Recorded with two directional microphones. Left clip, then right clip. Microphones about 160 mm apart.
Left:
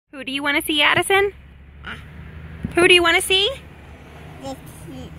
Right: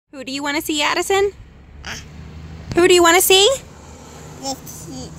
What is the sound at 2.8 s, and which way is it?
Speech, 45° right (ahead or behind).